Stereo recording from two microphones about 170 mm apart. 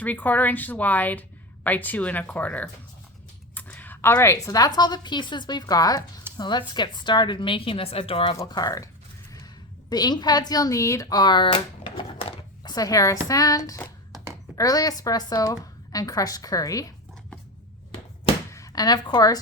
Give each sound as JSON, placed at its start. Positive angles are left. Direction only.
{"t": 0.0, "sound": "a woman's voice", "side_deg": 10}
{"t": 8.4, "sound": "a woman's voice", "side_deg": 20}
{"t": 9.9, "sound": "a woman's voice", "side_deg": 25}
{"t": 18.5, "sound": "a woman's voice", "side_deg": 20}